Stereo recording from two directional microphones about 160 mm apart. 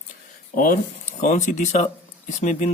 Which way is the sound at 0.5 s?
60° left (ahead or behind).